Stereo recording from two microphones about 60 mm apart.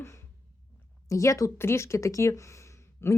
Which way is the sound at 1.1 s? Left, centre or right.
Left.